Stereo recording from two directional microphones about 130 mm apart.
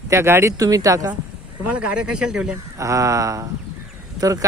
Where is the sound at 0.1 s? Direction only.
20° right (ahead or behind).